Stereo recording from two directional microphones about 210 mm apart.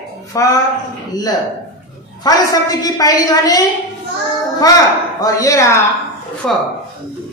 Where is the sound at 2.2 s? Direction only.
15° left (ahead or behind).